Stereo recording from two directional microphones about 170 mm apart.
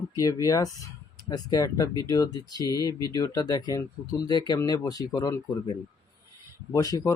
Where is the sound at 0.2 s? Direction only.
20° left (ahead or behind).